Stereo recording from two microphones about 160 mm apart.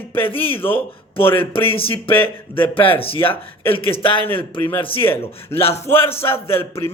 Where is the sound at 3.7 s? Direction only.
35° left (ahead or behind).